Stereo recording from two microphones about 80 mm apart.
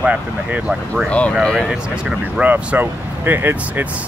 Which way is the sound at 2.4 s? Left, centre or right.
Right.